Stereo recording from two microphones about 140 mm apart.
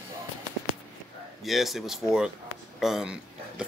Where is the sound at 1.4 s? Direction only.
Centre (ahead or behind).